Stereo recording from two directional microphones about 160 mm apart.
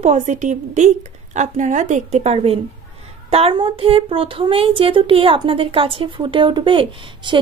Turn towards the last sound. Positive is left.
turn(degrees=-30)  # may be behind; listen again after turning